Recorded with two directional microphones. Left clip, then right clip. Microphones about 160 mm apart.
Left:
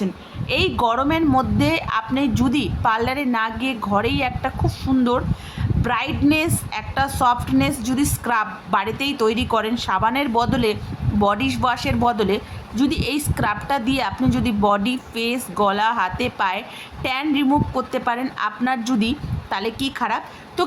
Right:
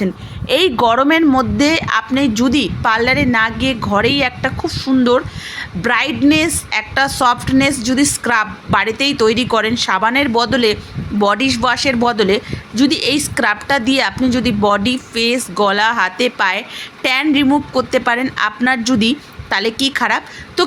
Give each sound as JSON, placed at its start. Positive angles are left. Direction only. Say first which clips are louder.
{"t": 0.4, "sound": "speech", "louder": "right 7 dB", "side_deg": -35}
{"t": 0.8, "sound": "a woman's voice", "louder": "right 7 dB", "side_deg": -20}